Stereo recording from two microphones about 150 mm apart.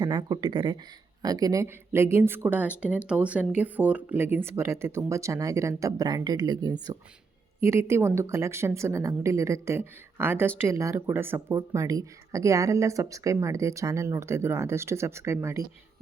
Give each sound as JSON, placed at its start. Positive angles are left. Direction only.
{"t": 0.0, "sound": "speech", "side_deg": -30}